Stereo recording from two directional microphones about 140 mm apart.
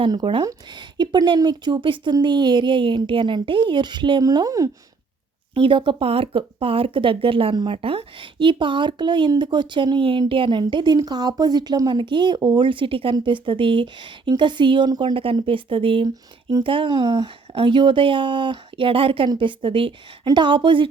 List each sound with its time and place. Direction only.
0.0 s speech: 35° right (ahead or behind)
5.5 s speech: 35° right (ahead or behind)